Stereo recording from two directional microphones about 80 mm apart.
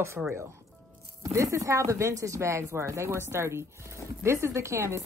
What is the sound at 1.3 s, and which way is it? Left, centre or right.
Speech, right.